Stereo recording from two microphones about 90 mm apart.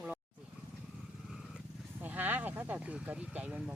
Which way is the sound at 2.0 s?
20° right (ahead or behind).